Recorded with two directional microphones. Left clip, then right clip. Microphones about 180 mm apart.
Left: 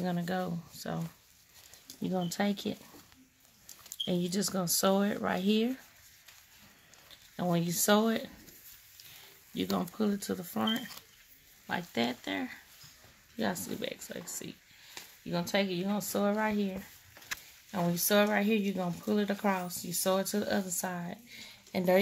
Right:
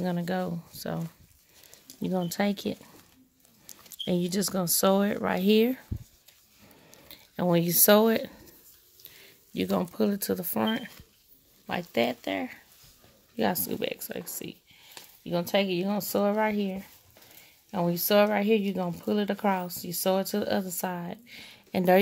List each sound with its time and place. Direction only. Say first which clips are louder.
0.0 s speech: right 4 dB; 35° right (ahead or behind)
2.0 s speech: right 4 dB; 45° right (ahead or behind)
7.1 s speech: right 6 dB; 40° right (ahead or behind)
9.6 s speech: right 6 dB; 40° right (ahead or behind)